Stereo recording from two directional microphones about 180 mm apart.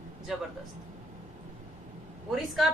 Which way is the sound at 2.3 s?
Centre (ahead or behind).